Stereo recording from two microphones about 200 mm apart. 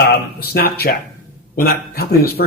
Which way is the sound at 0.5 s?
50° left (ahead or behind).